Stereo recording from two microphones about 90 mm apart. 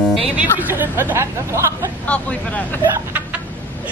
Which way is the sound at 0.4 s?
20° right (ahead or behind).